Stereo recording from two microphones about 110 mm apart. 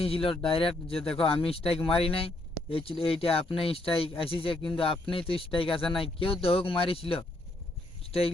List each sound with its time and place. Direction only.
0.0 s speech: 60° left (ahead or behind)
1.0 s speech: 5° left (ahead or behind)
1.3 s speech: 60° left (ahead or behind)